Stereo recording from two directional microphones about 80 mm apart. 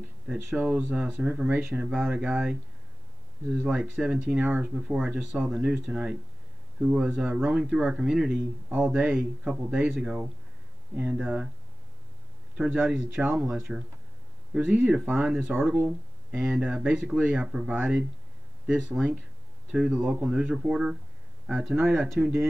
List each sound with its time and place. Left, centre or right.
0.6 s speech: centre
0.8 s speech: centre
1.1 s speech: centre
1.7 s speech: centre
3.8 s speech: centre
12.5 s speech: centre
15.5 s speech: right
16.3 s speech: centre
18.9 s speech: centre